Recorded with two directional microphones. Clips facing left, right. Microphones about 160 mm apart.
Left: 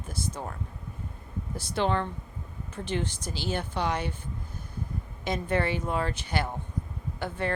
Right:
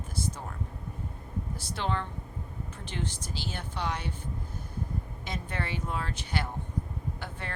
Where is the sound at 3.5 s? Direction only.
65° left (ahead or behind).